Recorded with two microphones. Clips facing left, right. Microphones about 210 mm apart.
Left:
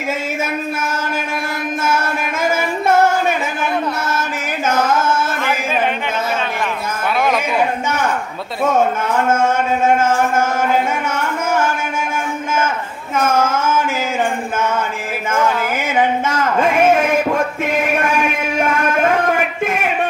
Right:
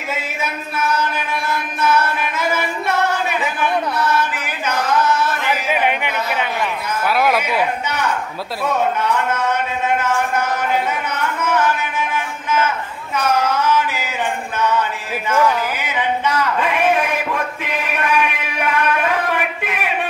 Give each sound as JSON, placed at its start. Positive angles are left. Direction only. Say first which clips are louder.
{"t": 1.5, "sound": "music", "louder": "right 2 dB", "side_deg": 45}
{"t": 4.6, "sound": "singing", "louder": "left 1 dB", "side_deg": 45}
{"t": 5.4, "sound": "a sound", "louder": "left 1 dB", "side_deg": -15}
{"t": 7.2, "sound": "a man's voice", "louder": "left 1 dB", "side_deg": -5}
{"t": 7.8, "sound": "speech", "louder": "left 2 dB", "side_deg": 45}
{"t": 13.1, "sound": "a sound", "louder": "left 2 dB", "side_deg": 45}